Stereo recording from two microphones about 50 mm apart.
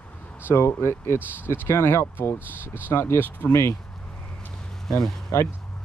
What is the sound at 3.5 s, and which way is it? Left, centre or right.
Speech, left.